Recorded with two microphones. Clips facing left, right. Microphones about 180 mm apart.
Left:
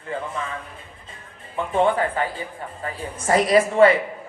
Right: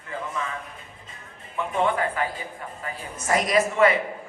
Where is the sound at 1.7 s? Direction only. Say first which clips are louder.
Left 4 dB; 30° left (ahead or behind).